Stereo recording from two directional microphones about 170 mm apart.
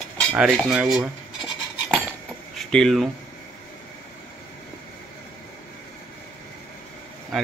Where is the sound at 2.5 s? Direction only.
Centre (ahead or behind).